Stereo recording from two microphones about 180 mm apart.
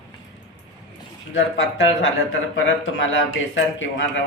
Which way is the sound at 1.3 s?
90° left.